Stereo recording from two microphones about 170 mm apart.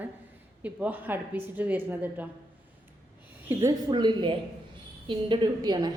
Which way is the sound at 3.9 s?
25° right (ahead or behind).